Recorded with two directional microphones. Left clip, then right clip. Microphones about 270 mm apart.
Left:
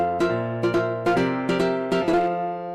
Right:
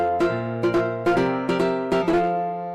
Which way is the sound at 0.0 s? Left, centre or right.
Centre.